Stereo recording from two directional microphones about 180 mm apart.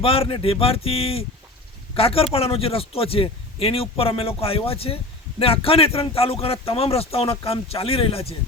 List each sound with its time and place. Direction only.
0.0 s speech: 30° left (ahead or behind)